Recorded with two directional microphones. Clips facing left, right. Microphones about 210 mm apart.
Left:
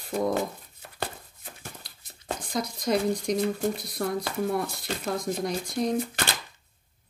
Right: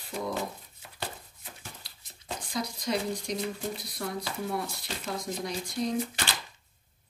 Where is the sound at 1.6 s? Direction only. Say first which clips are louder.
Left 4 dB; 50° left (ahead or behind).